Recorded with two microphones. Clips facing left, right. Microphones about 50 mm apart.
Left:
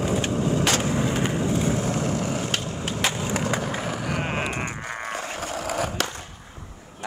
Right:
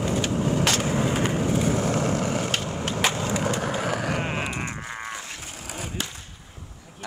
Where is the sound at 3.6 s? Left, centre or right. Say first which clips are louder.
Right 2 dB; right.